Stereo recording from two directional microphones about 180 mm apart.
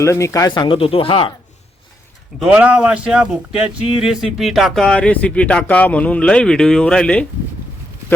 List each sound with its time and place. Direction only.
0.0 s speech: 15° left (ahead or behind)
2.4 s speech: 5° right (ahead or behind)